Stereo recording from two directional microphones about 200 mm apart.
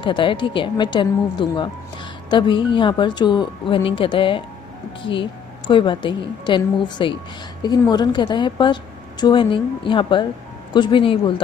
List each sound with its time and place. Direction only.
0.0 s a woman's voice: 25° left (ahead or behind)
5.7 s a woman's voice: 25° left (ahead or behind)